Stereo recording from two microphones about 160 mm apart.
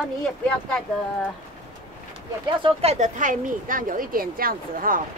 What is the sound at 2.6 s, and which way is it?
Speech, 35° right (ahead or behind).